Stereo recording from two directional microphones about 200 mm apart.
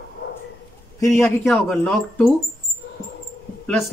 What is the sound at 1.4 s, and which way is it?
Speech, centre (ahead or behind).